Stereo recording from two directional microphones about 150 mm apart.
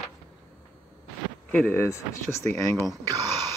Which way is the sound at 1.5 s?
15° left (ahead or behind).